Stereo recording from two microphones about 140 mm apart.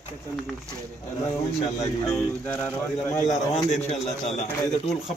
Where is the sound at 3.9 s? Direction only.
50° left (ahead or behind).